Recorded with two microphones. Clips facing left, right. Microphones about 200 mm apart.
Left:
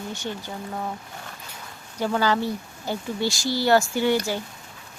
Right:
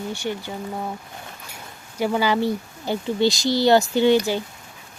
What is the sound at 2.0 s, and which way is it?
Speech, 15° right (ahead or behind).